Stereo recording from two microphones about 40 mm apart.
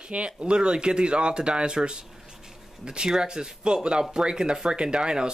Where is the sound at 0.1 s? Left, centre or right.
Right.